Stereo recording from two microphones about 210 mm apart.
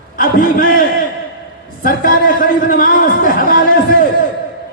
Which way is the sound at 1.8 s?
40° left (ahead or behind).